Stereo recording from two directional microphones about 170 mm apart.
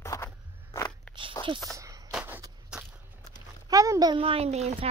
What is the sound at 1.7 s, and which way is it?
Walk, 20° right (ahead or behind).